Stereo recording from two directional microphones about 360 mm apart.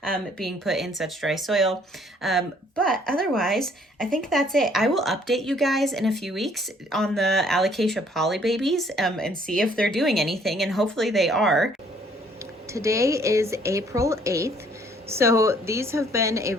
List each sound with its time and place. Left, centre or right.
0.0 s a woman's voice: centre
12.7 s a woman's voice: centre